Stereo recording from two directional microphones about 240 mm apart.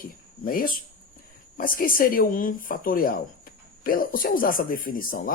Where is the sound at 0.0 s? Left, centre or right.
Left.